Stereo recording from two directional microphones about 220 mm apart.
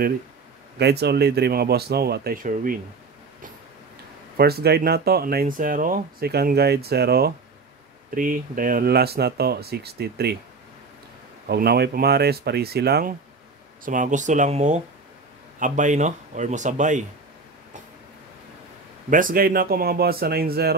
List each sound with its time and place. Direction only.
0.7 s speech: 50° right (ahead or behind)
4.4 s speech: 45° right (ahead or behind)
11.4 s speech: 45° right (ahead or behind)
13.8 s speech: 35° right (ahead or behind)
19.0 s speech: 40° right (ahead or behind)